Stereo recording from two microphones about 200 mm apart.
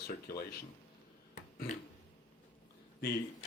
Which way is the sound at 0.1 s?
50° left (ahead or behind).